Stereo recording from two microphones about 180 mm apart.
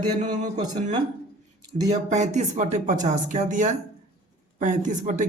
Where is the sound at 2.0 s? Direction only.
40° right (ahead or behind).